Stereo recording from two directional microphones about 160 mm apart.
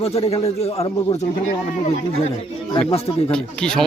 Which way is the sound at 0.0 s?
40° left (ahead or behind).